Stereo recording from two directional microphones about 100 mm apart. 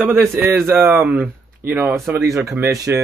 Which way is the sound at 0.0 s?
15° right (ahead or behind).